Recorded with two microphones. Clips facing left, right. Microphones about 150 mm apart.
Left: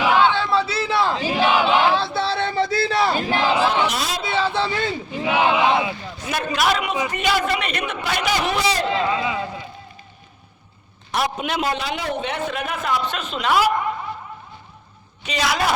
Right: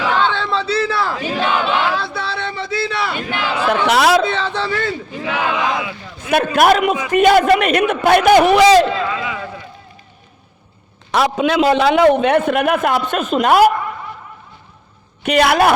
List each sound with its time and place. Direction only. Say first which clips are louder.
0.0 s battle cry: even; 10° left (ahead or behind)
1.4 s battle cry: left 1 dB; 5° left (ahead or behind)
1.8 s battle cry: left 1 dB; 25° left (ahead or behind)
3.8 s chatter: right 12 dB; 80° right
4.3 s battle cry: right 1 dB; 10° left (ahead or behind); by 6.3 s 25° left (ahead or behind)
6.3 s a man's voice: right 9 dB; 55° right (ahead or behind); by 8.8 s 90° right
9.0 s a man's voice: even; 25° left (ahead or behind)
11.1 s a man's voice: right 8 dB; 90° right; by 13.7 s 50° right (ahead or behind)
15.2 s a man's voice: right 9 dB; 60° right (ahead or behind)